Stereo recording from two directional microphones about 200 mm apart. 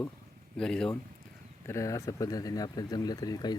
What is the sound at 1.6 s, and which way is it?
Speech, 15° left (ahead or behind).